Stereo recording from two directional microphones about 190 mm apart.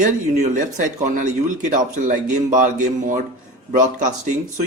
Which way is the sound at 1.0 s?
40° right (ahead or behind).